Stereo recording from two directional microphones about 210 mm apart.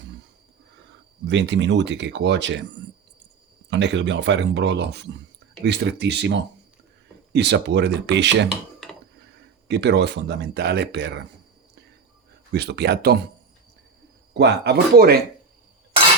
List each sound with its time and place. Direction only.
1.3 s speech: 55° right (ahead or behind)
3.7 s speech: 55° right (ahead or behind)
9.6 s speech: 55° right (ahead or behind)
12.5 s speech: 50° right (ahead or behind)
14.3 s speech: 50° right (ahead or behind)